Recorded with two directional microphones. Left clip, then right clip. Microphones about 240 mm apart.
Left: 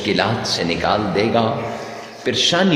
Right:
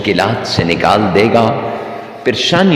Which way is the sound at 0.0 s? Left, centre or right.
Right.